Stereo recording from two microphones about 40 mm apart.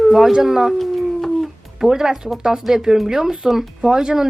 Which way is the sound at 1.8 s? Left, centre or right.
Centre.